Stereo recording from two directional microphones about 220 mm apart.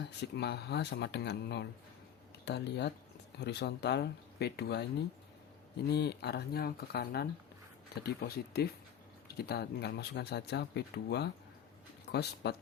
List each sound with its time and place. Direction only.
0.2 s speech: 50° left (ahead or behind)
5.9 s speech: 50° left (ahead or behind)